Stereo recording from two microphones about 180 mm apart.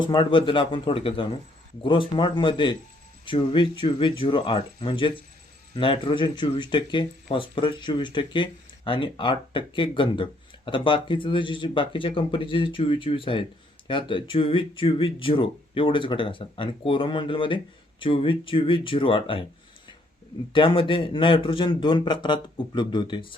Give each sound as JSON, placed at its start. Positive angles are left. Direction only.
{"t": 0.0, "sound": "speech", "side_deg": 25}
{"t": 20.5, "sound": "speech", "side_deg": 30}